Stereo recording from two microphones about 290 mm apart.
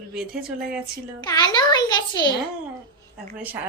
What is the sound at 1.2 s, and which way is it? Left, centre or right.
Speech, centre.